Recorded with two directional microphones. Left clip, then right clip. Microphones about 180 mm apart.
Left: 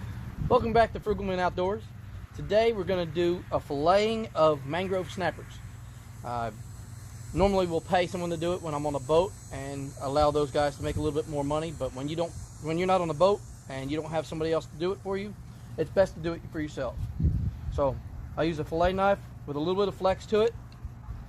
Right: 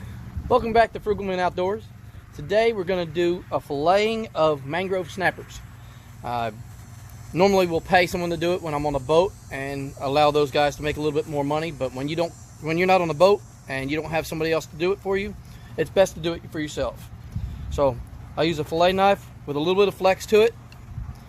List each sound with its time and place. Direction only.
0.4 s speech: 55° right (ahead or behind)
17.7 s a sound: 50° right (ahead or behind)
18.3 s speech: 50° right (ahead or behind)